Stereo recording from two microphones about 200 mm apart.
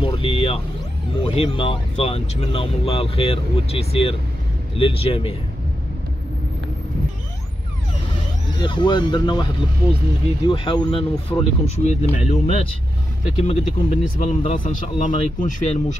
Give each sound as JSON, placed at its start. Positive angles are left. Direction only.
{"t": 0.0, "sound": "vehicle", "side_deg": 25}
{"t": 1.3, "sound": "speech", "side_deg": 25}
{"t": 8.5, "sound": "speech", "side_deg": 25}